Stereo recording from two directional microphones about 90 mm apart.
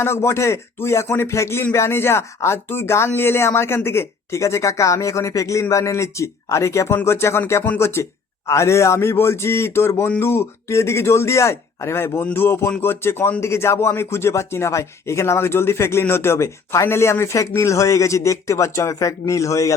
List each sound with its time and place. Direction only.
0.0 s speech: 25° left (ahead or behind)